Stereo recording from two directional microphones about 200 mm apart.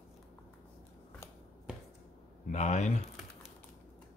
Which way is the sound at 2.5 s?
35° left (ahead or behind).